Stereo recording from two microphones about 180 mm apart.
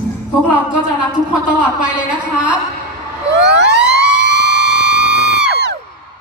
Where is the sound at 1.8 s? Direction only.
5° right (ahead or behind).